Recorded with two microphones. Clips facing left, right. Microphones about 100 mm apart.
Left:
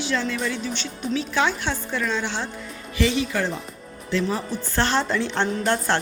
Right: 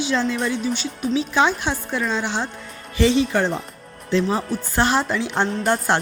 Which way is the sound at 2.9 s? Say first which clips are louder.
Right 5 dB; 30° right (ahead or behind).